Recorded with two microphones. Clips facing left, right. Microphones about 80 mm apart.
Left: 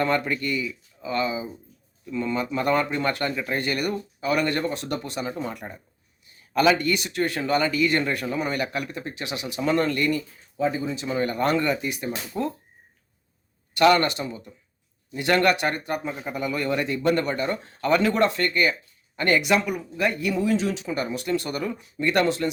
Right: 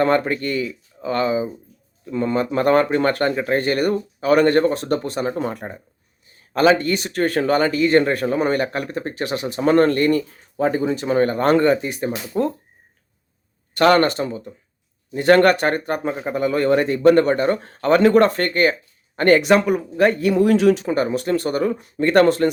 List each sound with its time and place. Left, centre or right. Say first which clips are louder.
0.0 s speech: right 6 dB; right
13.7 s speech: right 4 dB; right
20.9 s speech: right 6 dB; right